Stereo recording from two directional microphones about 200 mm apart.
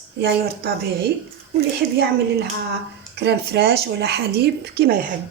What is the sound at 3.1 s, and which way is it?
Speech, 55° right (ahead or behind).